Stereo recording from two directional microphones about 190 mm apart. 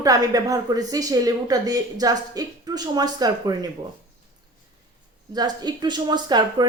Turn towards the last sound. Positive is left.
turn(degrees=-20)  # may be behind; listen again after turning